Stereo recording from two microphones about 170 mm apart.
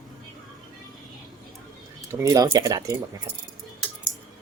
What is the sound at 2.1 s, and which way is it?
Speech, 20° right (ahead or behind).